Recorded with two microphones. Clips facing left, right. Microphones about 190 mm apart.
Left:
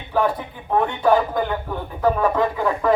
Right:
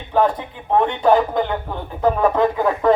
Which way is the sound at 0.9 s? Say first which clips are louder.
Right 1 dB; 25° right (ahead or behind).